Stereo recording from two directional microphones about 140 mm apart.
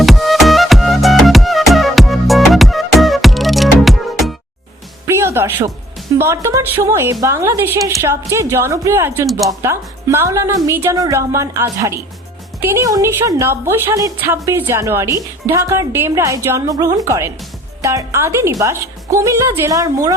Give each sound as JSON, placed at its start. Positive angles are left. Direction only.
{"t": 0.0, "sound": "music", "side_deg": 0}
{"t": 5.0, "sound": "music", "side_deg": -20}
{"t": 6.1, "sound": "a woman's voice", "side_deg": -20}